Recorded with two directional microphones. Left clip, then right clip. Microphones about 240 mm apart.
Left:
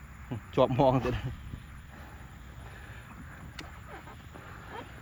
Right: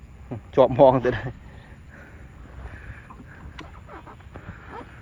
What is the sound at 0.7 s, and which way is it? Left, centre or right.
Speech, left.